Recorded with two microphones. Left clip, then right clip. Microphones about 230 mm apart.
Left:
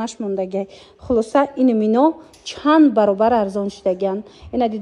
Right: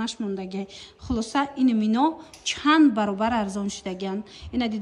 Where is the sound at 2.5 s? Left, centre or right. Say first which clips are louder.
Left 5 dB; right.